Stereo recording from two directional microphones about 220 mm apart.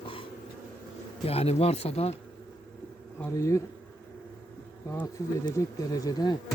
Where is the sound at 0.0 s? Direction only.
25° left (ahead or behind).